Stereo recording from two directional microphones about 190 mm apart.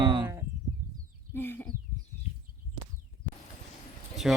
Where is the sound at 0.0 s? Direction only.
25° right (ahead or behind).